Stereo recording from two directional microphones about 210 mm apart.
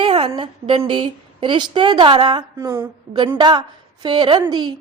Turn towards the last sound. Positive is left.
turn(degrees=-20)  # may be behind; listen again after turning